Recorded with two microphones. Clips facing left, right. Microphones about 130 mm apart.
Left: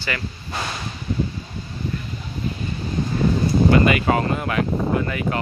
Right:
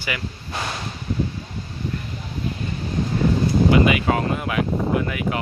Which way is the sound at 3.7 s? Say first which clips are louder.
Left 1 dB; 5° right (ahead or behind).